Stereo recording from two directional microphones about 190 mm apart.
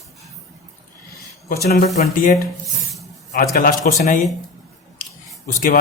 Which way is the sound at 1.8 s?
35° left (ahead or behind).